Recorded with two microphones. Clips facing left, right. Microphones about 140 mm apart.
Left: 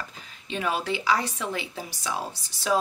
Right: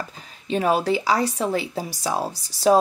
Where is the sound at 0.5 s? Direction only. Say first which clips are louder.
Right 8 dB; 40° right (ahead or behind).